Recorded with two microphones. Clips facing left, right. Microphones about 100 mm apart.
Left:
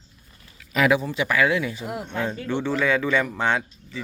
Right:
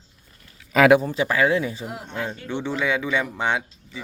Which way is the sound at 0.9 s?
45° right (ahead or behind).